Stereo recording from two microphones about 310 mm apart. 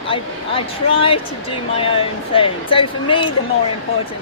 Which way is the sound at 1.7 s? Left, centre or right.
Centre.